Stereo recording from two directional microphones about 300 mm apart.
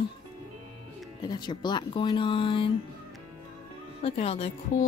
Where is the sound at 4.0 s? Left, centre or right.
Left.